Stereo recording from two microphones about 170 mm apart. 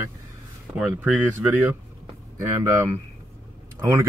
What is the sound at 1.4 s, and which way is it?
Speech, 10° right (ahead or behind).